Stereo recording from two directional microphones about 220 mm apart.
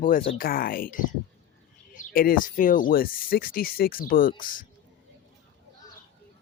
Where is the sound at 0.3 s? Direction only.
40° left (ahead or behind).